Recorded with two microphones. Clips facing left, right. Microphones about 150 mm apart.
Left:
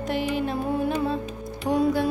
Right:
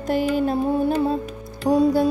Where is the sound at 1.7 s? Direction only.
40° right (ahead or behind).